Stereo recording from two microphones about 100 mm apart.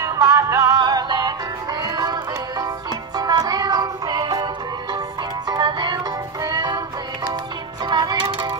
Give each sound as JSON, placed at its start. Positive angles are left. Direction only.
{"t": 0.0, "sound": "music", "side_deg": -35}
{"t": 3.2, "sound": "music", "side_deg": -40}
{"t": 5.5, "sound": "music", "side_deg": -45}
{"t": 7.8, "sound": "music", "side_deg": -45}